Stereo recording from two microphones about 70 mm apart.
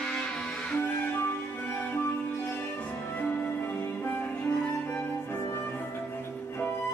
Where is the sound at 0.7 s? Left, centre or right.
Left.